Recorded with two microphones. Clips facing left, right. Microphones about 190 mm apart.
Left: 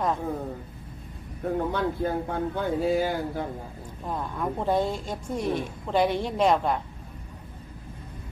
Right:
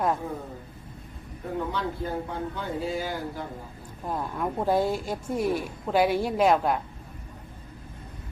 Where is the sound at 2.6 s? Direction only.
55° left (ahead or behind).